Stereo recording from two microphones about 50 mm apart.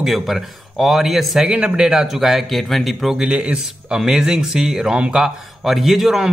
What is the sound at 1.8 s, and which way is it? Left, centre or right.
A man's voice, centre.